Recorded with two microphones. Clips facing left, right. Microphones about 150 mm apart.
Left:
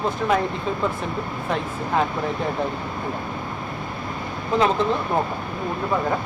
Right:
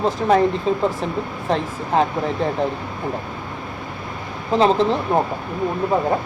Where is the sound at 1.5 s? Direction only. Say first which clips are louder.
Right 4 dB; 35° right (ahead or behind).